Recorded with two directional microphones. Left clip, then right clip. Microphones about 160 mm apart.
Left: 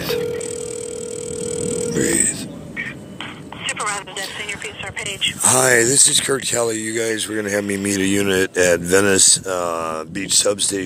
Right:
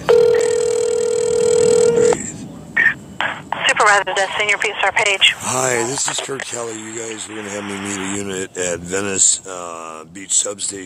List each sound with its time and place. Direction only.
0.2 s telephone: 35° right (ahead or behind)
5.5 s speech: centre (ahead or behind)
5.9 s speech: 20° right (ahead or behind)
6.2 s speech: 15° left (ahead or behind)